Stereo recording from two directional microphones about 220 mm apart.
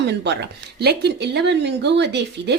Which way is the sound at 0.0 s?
50° right (ahead or behind).